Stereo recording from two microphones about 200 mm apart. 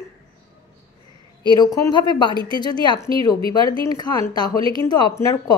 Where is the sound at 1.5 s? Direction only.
20° left (ahead or behind).